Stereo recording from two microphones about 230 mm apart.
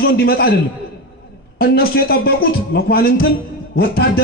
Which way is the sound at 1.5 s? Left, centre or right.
Left.